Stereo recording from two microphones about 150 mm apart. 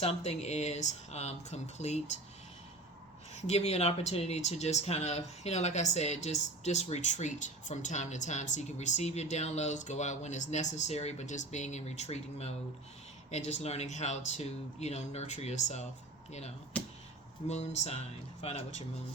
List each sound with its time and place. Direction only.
0.0 s speech: 45° left (ahead or behind)
3.3 s speech: 45° left (ahead or behind)
16.7 s a sound: 10° left (ahead or behind)
17.5 s speech: 50° left (ahead or behind)